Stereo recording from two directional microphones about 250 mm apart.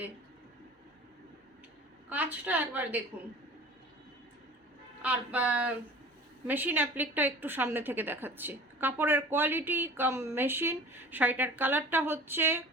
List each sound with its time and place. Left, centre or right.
2.0 s a woman's voice: centre
5.0 s a woman's voice: centre